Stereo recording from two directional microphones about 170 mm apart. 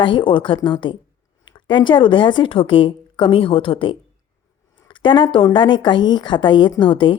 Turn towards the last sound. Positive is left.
turn(degrees=30)  # may be behind; listen again after turning